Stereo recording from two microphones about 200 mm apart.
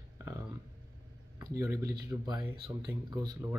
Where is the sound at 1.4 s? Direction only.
15° right (ahead or behind).